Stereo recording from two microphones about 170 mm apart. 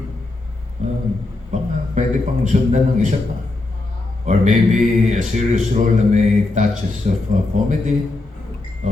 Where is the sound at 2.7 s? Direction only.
50° right (ahead or behind).